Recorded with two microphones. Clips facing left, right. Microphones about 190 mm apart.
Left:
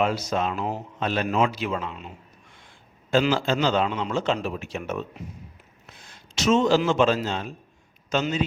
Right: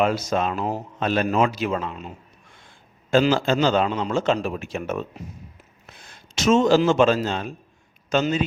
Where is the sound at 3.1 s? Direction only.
45° right (ahead or behind).